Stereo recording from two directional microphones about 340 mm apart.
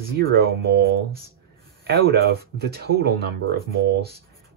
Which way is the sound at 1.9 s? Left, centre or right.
Right.